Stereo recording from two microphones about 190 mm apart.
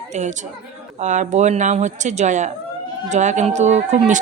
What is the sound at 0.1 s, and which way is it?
A woman's voice, 40° right (ahead or behind).